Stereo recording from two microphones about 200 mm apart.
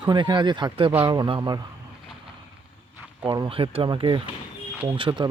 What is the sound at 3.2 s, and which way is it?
Speech, 25° right (ahead or behind).